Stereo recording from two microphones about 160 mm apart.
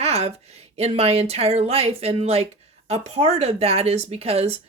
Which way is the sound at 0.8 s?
40° right (ahead or behind).